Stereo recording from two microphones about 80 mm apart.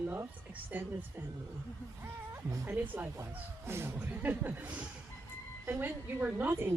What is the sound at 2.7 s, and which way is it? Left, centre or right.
A woman's voice, right.